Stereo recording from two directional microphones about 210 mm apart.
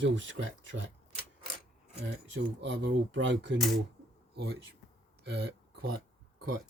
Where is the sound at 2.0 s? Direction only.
55° right (ahead or behind).